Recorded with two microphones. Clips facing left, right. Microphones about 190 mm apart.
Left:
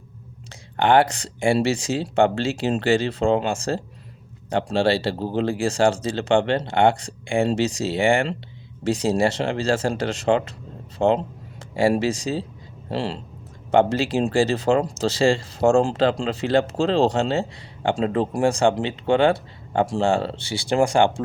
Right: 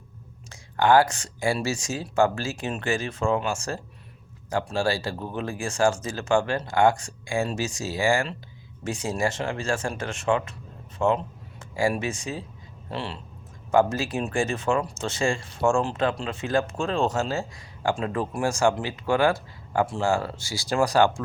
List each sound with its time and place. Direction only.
0.8 s a man's voice: 30° left (ahead or behind)